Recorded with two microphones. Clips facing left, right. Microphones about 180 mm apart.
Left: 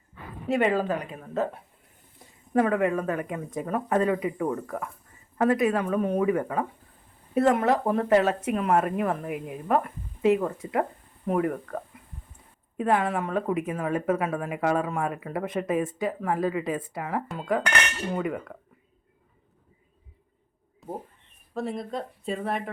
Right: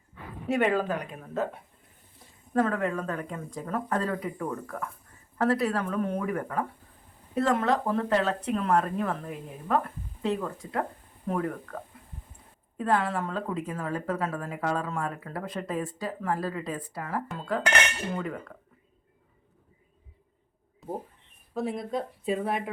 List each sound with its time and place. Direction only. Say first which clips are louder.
0.4 s speech: left 2 dB; centre (ahead or behind)
2.5 s speech: left 4 dB; 15° left (ahead or behind)
12.7 s speech: left 2 dB; 20° left (ahead or behind)
20.8 s speech: right 1 dB; centre (ahead or behind)